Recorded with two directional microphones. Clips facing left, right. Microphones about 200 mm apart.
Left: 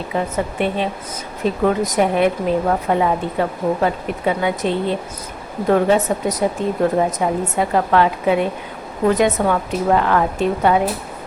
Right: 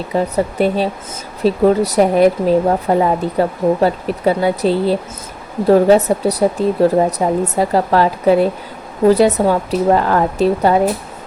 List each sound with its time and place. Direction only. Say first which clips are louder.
0.1 s a woman's voice: right 5 dB; 40° right (ahead or behind)